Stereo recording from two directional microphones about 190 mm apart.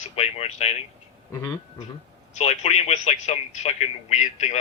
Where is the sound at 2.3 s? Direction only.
35° left (ahead or behind).